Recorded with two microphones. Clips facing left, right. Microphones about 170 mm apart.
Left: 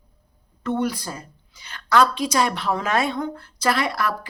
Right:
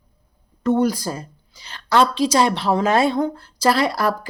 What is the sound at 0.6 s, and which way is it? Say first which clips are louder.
Speech: right 6 dB; 40° right (ahead or behind).